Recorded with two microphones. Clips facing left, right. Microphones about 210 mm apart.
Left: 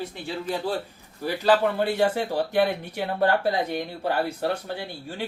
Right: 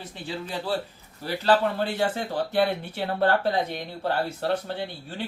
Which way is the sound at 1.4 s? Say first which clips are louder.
Left 1 dB; 10° left (ahead or behind).